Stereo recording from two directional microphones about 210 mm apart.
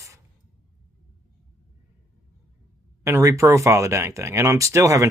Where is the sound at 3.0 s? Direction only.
15° right (ahead or behind).